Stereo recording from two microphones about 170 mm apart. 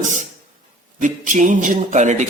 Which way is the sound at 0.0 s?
45° right (ahead or behind).